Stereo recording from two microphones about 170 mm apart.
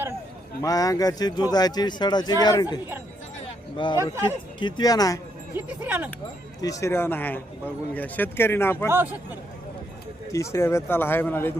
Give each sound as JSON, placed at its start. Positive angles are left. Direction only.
{"t": 0.6, "sound": "speech", "side_deg": 20}
{"t": 3.4, "sound": "a sound", "side_deg": 30}
{"t": 4.2, "sound": "speech", "side_deg": 25}
{"t": 5.5, "sound": "speech", "side_deg": -10}
{"t": 6.6, "sound": "speech", "side_deg": 20}
{"t": 10.3, "sound": "speech", "side_deg": 15}